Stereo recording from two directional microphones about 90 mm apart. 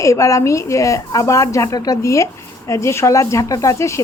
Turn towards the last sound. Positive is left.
turn(degrees=35)  # may be behind; listen again after turning